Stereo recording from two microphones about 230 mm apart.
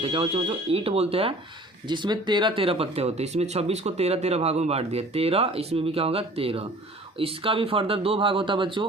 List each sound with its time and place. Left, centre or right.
0.0 s speech: right